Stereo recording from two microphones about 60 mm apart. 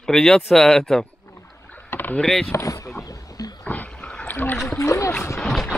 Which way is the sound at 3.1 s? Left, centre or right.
Left.